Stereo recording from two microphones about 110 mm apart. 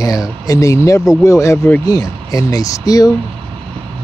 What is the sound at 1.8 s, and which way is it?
Speech, 35° left (ahead or behind).